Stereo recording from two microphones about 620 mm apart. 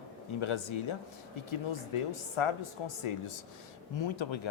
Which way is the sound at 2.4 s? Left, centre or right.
Left.